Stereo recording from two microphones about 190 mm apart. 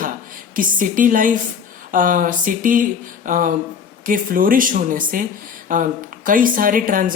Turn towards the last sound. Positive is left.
turn(degrees=-45)  # may be behind; listen again after turning